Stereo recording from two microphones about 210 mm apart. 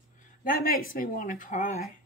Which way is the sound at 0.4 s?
40° left (ahead or behind).